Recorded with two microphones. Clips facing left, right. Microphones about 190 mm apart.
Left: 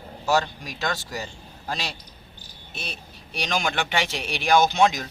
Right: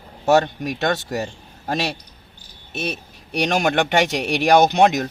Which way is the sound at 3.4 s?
55° right (ahead or behind).